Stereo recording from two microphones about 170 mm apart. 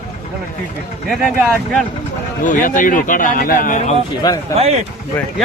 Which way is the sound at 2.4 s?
50° left (ahead or behind).